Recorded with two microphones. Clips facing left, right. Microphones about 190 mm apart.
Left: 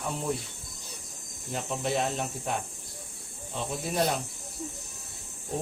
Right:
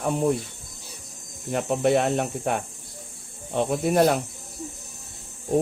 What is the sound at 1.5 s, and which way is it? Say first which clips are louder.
Speech: right 9 dB; 60° right (ahead or behind).